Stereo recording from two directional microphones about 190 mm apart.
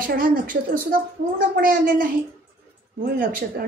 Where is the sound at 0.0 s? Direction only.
50° right (ahead or behind).